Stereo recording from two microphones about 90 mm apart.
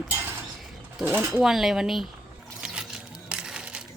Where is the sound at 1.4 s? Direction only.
5° right (ahead or behind).